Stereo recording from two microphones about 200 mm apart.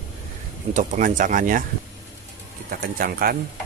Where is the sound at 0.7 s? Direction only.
40° right (ahead or behind).